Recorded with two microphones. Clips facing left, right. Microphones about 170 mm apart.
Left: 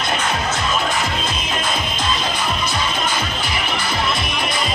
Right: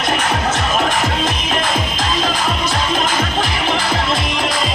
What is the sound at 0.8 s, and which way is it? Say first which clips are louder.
Music: right 4 dB; 90° right.